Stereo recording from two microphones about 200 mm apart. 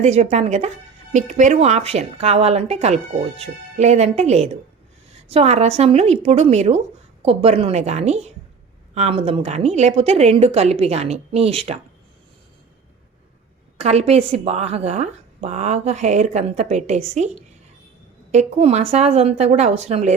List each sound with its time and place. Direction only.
0.0 s a woman's voice: 35° right (ahead or behind)
13.7 s a woman's voice: 35° right (ahead or behind)